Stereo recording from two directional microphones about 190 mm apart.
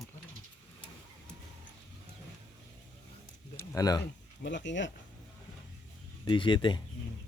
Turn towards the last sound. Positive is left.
turn(degrees=25)  # may be behind; listen again after turning